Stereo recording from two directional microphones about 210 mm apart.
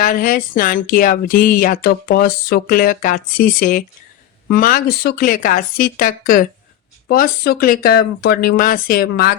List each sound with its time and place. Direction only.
0.0 s speech: 40° left (ahead or behind)